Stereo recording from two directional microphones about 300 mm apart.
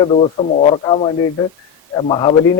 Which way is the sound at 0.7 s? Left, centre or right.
Centre.